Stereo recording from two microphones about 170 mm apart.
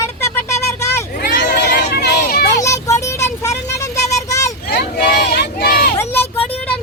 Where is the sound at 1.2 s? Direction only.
70° left (ahead or behind).